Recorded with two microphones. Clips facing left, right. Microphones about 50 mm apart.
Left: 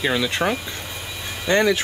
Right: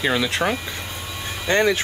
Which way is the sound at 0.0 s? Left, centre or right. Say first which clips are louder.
Even; centre.